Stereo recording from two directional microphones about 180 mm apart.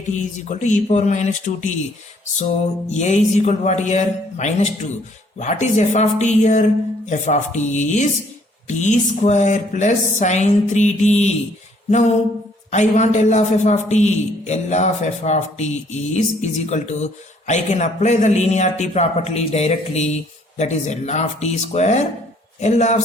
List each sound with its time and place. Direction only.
0.1 s a man's voice: 40° left (ahead or behind)
2.9 s a man's voice: 40° left (ahead or behind)